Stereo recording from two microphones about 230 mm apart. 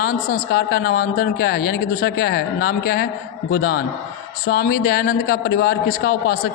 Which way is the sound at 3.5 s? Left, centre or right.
Left.